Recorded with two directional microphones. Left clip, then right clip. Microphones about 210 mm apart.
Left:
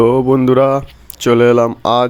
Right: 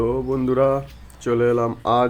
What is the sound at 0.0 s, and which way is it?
Speech, 45° left (ahead or behind).